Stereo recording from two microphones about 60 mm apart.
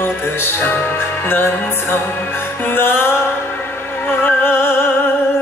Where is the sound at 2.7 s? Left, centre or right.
Left.